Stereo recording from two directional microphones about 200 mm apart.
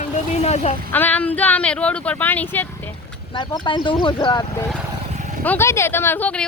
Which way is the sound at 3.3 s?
20° left (ahead or behind).